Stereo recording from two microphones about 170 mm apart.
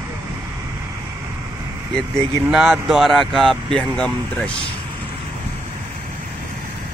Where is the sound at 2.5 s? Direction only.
Centre (ahead or behind).